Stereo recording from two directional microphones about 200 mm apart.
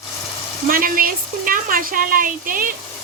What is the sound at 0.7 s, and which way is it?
A woman's voice, 45° right (ahead or behind).